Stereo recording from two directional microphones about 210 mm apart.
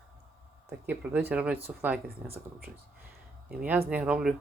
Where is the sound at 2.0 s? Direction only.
45° right (ahead or behind).